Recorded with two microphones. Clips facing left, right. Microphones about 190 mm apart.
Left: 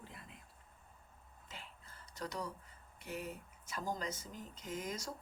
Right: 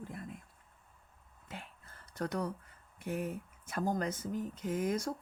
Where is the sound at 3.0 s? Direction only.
55° right (ahead or behind).